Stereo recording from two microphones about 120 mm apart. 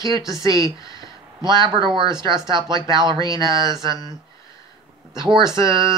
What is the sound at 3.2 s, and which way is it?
Speech, 30° left (ahead or behind).